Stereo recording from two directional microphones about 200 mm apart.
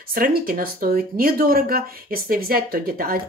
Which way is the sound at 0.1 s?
45° right (ahead or behind).